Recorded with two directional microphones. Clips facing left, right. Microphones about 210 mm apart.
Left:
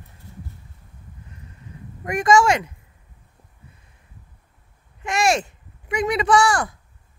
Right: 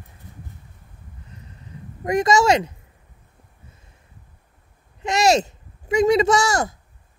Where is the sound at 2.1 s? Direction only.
40° right (ahead or behind).